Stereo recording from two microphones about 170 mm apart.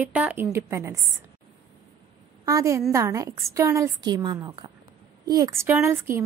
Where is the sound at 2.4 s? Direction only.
20° right (ahead or behind).